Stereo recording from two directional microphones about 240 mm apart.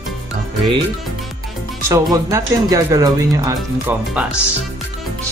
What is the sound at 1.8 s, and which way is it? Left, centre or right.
Speech, centre.